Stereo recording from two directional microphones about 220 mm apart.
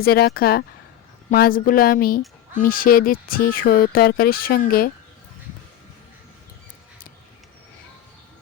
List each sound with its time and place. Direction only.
0.0 s speech: 45° left (ahead or behind)